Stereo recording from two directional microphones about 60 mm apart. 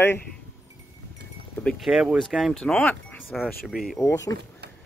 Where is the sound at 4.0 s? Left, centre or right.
Left.